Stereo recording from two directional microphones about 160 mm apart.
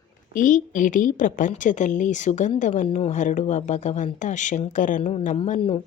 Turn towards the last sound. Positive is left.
turn(degrees=40)  # may be behind; listen again after turning